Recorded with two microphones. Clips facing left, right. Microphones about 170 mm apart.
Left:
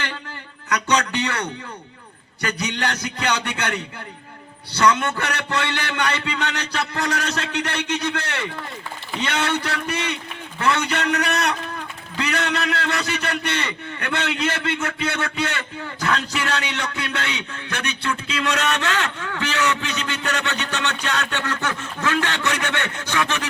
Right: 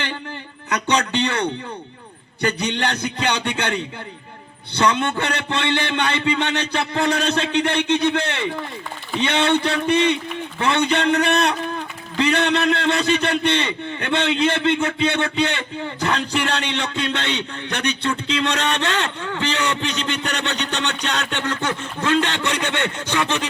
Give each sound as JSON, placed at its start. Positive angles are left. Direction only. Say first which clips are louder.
{"t": 0.7, "sound": "a sound", "louder": "right 1 dB", "side_deg": -25}
{"t": 2.4, "sound": "a man's voice", "louder": "right 3 dB", "side_deg": -20}
{"t": 4.8, "sound": "a man's voice", "louder": "even", "side_deg": -25}